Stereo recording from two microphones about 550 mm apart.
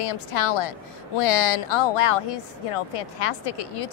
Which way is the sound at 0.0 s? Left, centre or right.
Left.